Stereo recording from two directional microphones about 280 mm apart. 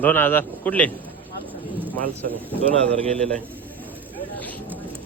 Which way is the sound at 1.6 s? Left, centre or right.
Centre.